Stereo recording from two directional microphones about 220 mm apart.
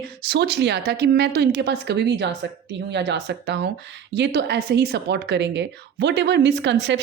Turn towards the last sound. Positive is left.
turn(degrees=-50)  # may be behind; listen again after turning